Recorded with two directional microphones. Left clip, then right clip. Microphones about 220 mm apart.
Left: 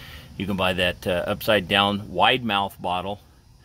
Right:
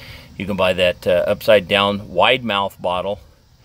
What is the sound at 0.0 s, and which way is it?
Speech, 5° right (ahead or behind).